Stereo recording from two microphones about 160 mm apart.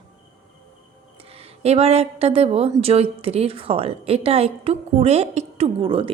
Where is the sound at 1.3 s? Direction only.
40° right (ahead or behind).